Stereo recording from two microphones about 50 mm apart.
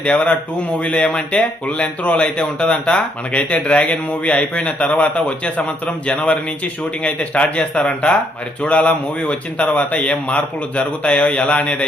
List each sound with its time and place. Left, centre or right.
0.0 s speech: left